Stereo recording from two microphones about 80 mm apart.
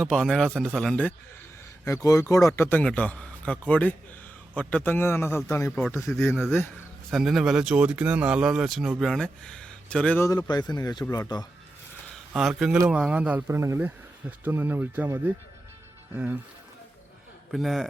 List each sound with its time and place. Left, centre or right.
0.0 s a man's voice: centre
2.0 s speech: left
2.8 s a man's voice: centre
7.1 s speech: centre
9.0 s speech: centre
10.5 s speech: left
12.3 s a man's voice: centre
12.9 s speech: centre
13.5 s speech: right
13.7 s speech: right
16.1 s speech: right
17.5 s a man's voice: centre